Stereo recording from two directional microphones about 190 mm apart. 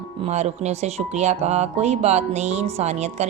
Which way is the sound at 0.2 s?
35° right (ahead or behind).